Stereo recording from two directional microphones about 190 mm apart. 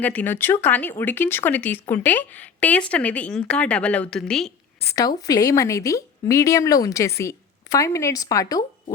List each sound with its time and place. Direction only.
0.0 s speech: 10° left (ahead or behind)
4.9 s speech: 20° left (ahead or behind)